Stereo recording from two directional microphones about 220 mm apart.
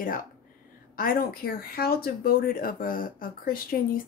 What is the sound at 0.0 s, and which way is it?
Speech, 40° left (ahead or behind).